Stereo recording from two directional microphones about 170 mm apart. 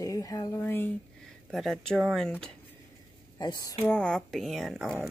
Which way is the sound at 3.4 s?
25° left (ahead or behind).